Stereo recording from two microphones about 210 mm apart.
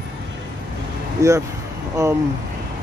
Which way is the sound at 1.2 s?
15° right (ahead or behind).